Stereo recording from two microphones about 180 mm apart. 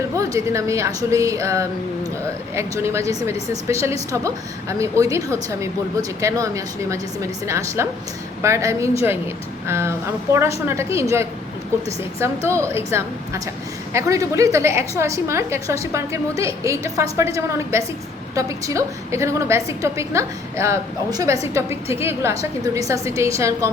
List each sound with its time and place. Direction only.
0.2 s a woman's voice: 15° right (ahead or behind)
12.5 s a woman's voice: 15° right (ahead or behind)